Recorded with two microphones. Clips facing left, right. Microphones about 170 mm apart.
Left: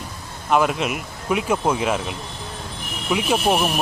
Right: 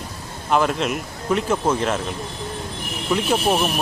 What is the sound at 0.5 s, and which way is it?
Speech, 5° left (ahead or behind).